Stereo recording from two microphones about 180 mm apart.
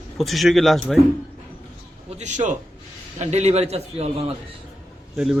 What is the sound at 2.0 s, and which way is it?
A man's voice, 40° right (ahead or behind).